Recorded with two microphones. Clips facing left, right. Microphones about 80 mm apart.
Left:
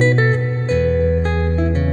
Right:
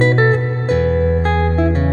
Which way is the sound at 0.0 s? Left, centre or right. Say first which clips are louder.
Right 2 dB; right.